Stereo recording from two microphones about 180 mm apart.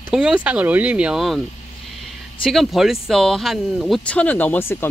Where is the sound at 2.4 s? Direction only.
Centre (ahead or behind).